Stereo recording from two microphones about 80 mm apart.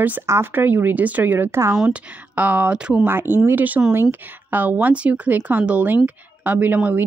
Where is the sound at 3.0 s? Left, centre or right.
Right.